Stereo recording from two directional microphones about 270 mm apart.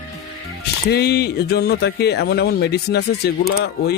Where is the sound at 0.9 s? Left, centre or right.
Left.